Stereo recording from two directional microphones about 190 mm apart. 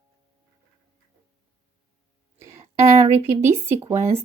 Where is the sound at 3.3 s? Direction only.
15° right (ahead or behind).